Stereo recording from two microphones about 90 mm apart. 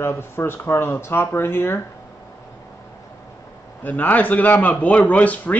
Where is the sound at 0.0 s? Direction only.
25° left (ahead or behind).